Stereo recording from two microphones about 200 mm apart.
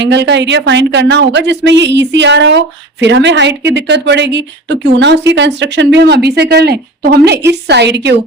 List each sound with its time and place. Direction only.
0.0 s a woman's voice: 60° right (ahead or behind)